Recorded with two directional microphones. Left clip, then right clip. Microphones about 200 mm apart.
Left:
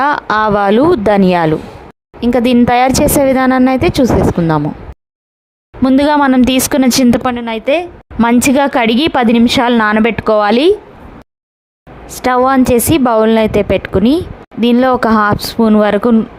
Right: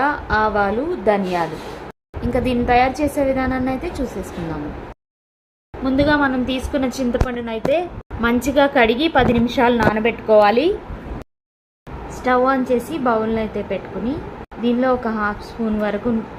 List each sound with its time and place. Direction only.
0.0 s a woman's voice: 50° left (ahead or behind)
5.8 s speech: 55° left (ahead or behind)
7.3 s a woman's voice: 40° left (ahead or behind)
12.2 s a woman's voice: 50° left (ahead or behind)